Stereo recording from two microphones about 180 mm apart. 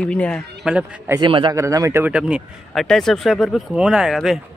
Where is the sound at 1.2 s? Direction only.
25° right (ahead or behind); by 4.4 s centre (ahead or behind).